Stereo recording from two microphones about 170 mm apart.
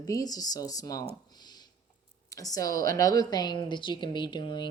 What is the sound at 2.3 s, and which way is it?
A woman's voice, 20° left (ahead or behind).